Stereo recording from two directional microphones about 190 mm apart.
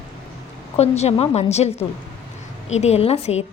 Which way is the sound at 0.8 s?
35° left (ahead or behind).